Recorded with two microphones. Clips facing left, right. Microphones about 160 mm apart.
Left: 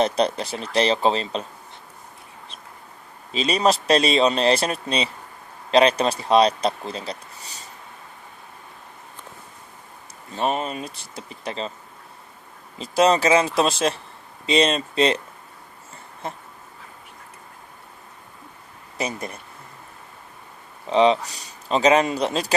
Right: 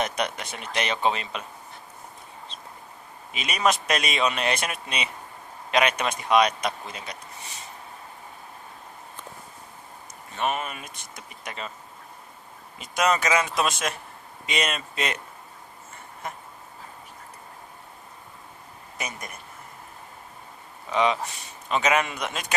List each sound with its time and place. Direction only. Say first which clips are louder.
0.0 s speech: left 7 dB; 30° left (ahead or behind)
3.3 s speech: left 5 dB; 30° left (ahead or behind)
10.3 s speech: left 4 dB; 30° left (ahead or behind)
12.8 s speech: left 6 dB; 30° left (ahead or behind)
16.2 s speech: left 4 dB; 30° left (ahead or behind)
18.9 s speech: left 8 dB; 30° left (ahead or behind)
20.9 s speech: left 6 dB; 30° left (ahead or behind)